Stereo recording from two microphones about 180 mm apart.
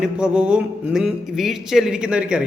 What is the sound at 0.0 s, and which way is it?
A man's voice, 5° right (ahead or behind).